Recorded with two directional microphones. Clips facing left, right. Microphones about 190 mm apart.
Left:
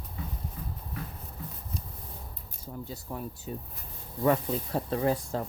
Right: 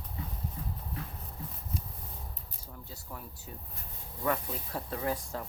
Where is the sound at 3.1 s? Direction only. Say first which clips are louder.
Left 8 dB; 25° left (ahead or behind).